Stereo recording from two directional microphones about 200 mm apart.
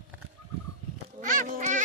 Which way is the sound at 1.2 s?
40° right (ahead or behind).